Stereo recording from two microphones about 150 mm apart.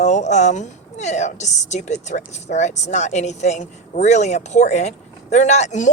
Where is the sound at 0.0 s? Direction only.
50° left (ahead or behind).